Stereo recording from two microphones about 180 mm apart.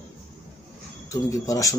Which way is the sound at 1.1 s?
20° left (ahead or behind).